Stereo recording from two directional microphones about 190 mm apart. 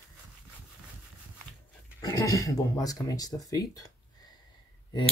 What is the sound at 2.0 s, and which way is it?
Speech, 20° left (ahead or behind).